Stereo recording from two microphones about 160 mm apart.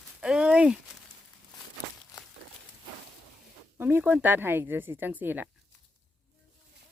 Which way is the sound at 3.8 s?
15° right (ahead or behind).